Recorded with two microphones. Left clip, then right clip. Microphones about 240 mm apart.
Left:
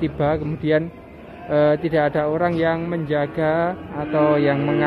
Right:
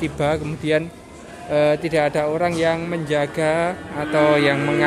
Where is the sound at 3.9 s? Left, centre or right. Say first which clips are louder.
Right 2 dB; right.